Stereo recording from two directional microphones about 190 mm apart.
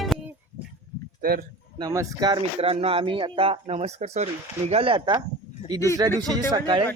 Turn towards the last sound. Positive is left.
turn(degrees=-20)  # may be behind; listen again after turning